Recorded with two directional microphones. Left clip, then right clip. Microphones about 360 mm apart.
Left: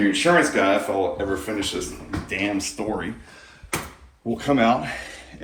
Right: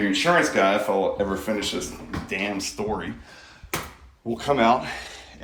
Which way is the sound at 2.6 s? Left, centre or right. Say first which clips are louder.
Left 2 dB; right.